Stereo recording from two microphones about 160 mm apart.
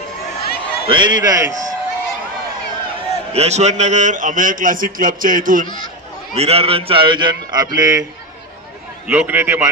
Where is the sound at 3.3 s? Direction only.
45° right (ahead or behind).